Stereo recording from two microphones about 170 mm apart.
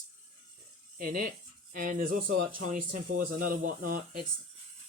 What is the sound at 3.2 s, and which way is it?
Speech, 55° right (ahead or behind).